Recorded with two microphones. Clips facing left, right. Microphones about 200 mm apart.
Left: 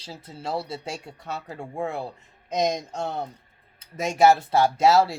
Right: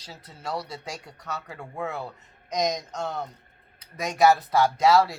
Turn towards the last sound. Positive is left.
turn(degrees=25)  # may be behind; listen again after turning